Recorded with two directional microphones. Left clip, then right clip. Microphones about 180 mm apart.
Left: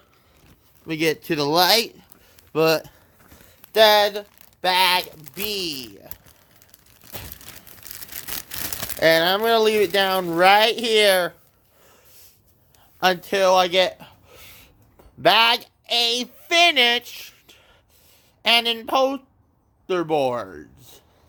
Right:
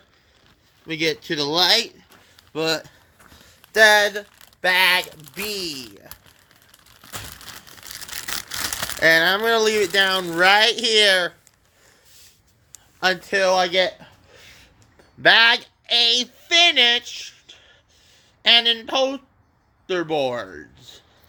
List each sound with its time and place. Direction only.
0.9 s speech: 30° left (ahead or behind)
3.6 s speech: 15° left (ahead or behind)
7.9 s a sound: 25° left (ahead or behind)
8.4 s speech: 30° left (ahead or behind)
13.0 s speech: 25° left (ahead or behind)
16.1 s speech: 25° left (ahead or behind)